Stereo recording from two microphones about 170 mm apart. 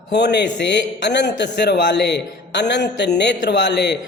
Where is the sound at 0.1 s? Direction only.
80° left.